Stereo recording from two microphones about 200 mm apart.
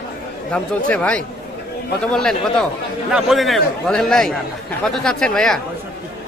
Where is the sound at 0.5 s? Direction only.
5° left (ahead or behind).